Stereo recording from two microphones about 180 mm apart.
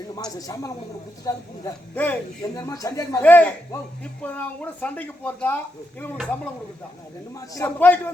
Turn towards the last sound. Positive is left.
turn(degrees=10)  # may be behind; listen again after turning